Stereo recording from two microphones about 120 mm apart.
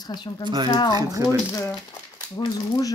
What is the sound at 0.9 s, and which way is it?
Speech, 30° right (ahead or behind).